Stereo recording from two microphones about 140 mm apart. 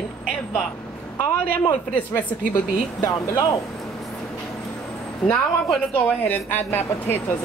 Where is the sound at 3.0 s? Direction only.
25° left (ahead or behind).